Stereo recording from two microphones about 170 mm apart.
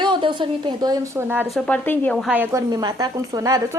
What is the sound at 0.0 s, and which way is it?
A woman's voice, 25° right (ahead or behind).